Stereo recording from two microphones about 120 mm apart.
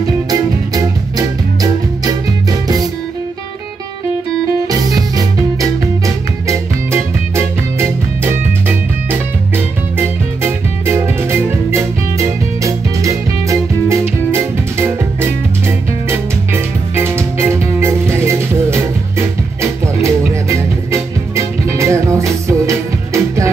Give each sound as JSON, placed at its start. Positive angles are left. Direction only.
{"t": 0.3, "sound": "music", "side_deg": -30}
{"t": 4.6, "sound": "music", "side_deg": -30}